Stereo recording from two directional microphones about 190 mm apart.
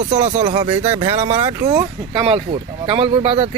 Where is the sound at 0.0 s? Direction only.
40° right (ahead or behind).